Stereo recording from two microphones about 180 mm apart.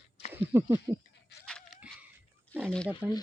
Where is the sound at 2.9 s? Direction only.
10° right (ahead or behind).